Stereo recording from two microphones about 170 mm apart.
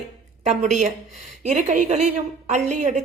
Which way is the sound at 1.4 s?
45° right (ahead or behind).